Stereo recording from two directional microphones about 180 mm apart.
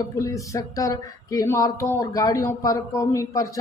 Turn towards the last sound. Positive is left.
turn(degrees=20)  # may be behind; listen again after turning